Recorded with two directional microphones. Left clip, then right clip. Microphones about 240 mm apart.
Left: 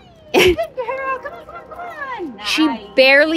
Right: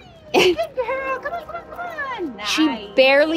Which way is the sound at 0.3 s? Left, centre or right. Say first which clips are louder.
Left 3 dB; centre.